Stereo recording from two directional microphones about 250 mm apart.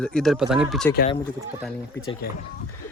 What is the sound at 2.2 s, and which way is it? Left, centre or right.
Speech, left.